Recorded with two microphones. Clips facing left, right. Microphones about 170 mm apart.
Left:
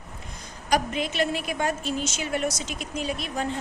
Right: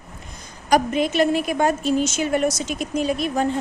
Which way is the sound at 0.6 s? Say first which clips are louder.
Right 6 dB; 45° right (ahead or behind).